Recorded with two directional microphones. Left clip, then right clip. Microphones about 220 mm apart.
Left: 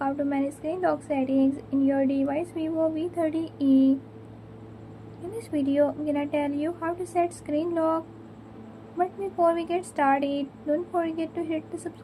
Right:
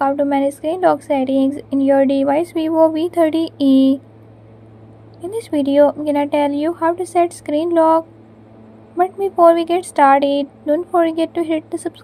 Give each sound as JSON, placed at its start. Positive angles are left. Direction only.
{"t": 0.0, "sound": "a woman's voice", "side_deg": -35}
{"t": 5.4, "sound": "a woman's voice", "side_deg": -40}